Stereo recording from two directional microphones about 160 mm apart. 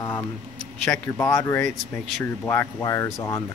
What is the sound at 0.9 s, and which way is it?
Speech, 15° left (ahead or behind).